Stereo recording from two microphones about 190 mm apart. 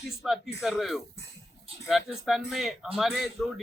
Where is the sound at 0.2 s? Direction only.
Centre (ahead or behind).